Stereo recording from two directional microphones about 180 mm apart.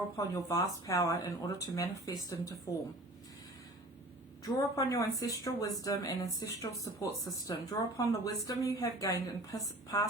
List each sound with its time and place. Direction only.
0.2 s speech: 20° left (ahead or behind)
4.4 s speech: 20° left (ahead or behind)